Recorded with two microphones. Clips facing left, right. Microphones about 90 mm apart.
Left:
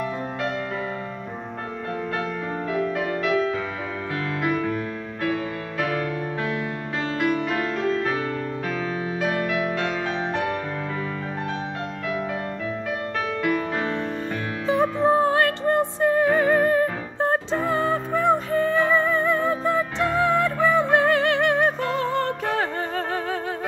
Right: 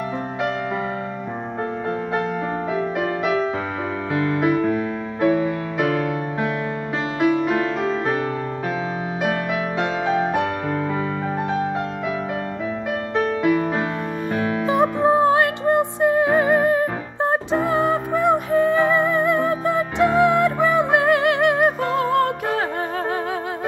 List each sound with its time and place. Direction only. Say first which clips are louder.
4.1 s music: right 6 dB; 20° right (ahead or behind)
7.2 s music: right 6 dB; 15° right (ahead or behind)
9.8 s music: right 5 dB; 15° right (ahead or behind)
13.4 s music: right 2 dB; 20° right (ahead or behind)